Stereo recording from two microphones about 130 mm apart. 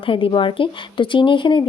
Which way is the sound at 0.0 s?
40° left (ahead or behind).